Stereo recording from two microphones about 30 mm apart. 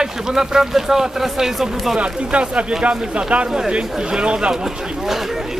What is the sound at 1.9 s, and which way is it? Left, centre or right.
Speech, right.